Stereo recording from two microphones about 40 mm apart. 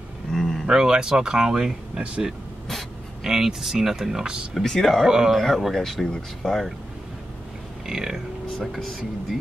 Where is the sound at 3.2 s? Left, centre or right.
Centre.